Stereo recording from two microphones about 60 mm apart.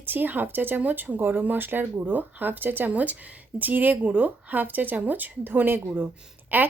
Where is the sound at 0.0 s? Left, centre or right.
Right.